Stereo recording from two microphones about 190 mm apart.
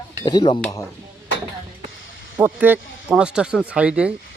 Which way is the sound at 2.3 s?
10° right (ahead or behind).